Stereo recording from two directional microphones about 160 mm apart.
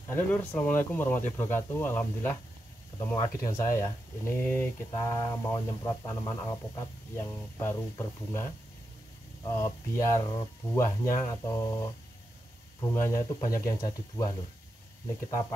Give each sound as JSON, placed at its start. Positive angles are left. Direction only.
{"t": 0.1, "sound": "speech", "side_deg": 10}
{"t": 9.4, "sound": "speech", "side_deg": 20}
{"t": 12.9, "sound": "speech", "side_deg": 20}